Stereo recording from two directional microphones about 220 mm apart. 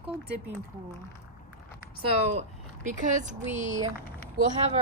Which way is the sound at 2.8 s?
35° right (ahead or behind).